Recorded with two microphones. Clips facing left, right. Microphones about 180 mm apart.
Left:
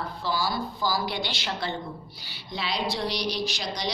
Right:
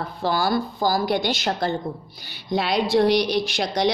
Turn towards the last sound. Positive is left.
turn(degrees=-55)  # may be behind; listen again after turning